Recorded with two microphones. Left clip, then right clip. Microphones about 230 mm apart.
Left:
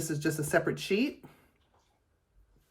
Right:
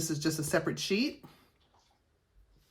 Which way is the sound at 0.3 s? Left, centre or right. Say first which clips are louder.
Left 2 dB; centre.